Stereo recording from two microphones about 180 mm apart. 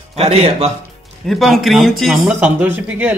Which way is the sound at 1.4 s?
Centre (ahead or behind).